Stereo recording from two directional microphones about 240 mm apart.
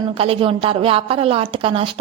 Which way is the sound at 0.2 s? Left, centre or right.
Right.